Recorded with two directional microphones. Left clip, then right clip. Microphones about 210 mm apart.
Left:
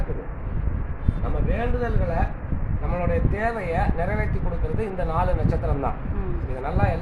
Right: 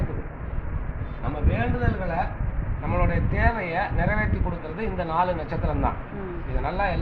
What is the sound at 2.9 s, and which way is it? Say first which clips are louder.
Speech: left 1 dB; 15° left (ahead or behind).